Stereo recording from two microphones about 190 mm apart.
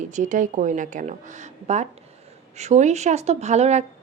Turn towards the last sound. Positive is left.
turn(degrees=-35)  # may be behind; listen again after turning